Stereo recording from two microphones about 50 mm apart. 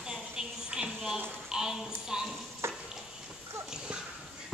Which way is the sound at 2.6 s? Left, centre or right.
Right.